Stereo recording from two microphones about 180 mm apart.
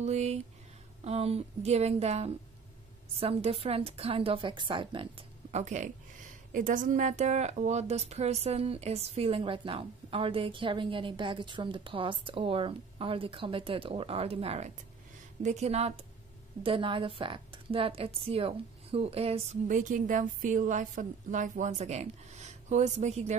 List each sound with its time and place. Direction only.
0.0 s a woman's voice: 40° right (ahead or behind)
5.5 s a woman's voice: 40° right (ahead or behind)